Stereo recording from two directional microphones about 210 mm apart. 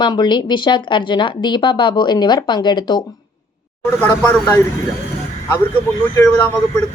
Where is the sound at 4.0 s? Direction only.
10° left (ahead or behind).